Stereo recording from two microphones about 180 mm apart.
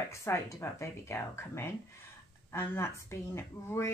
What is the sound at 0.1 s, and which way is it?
Speech, 15° left (ahead or behind).